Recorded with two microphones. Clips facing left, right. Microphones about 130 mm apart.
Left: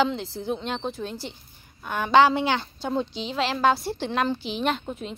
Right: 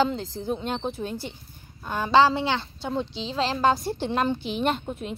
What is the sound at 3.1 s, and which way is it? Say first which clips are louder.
Speech: left 1 dB; 30° right (ahead or behind).